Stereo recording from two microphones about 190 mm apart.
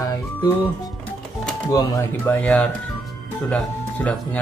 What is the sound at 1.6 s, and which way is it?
Speech, 15° left (ahead or behind).